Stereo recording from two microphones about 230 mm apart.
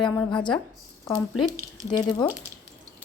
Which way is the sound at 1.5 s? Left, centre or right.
Centre.